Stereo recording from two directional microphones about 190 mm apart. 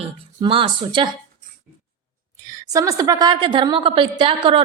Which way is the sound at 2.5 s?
15° right (ahead or behind).